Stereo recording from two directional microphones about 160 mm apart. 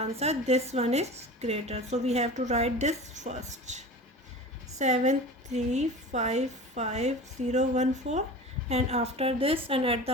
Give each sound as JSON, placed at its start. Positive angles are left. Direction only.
{"t": 0.0, "sound": "a woman's voice", "side_deg": -40}